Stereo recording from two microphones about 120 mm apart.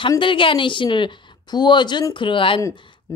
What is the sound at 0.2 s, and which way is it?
A woman's voice, 45° left (ahead or behind).